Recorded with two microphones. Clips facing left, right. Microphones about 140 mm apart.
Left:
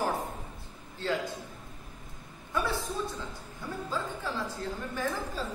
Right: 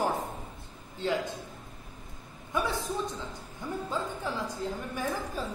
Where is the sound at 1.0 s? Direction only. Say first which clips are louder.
Right 1 dB; 15° right (ahead or behind).